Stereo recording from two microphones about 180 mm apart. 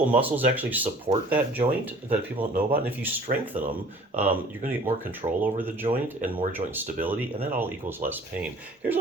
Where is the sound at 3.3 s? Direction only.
40° right (ahead or behind).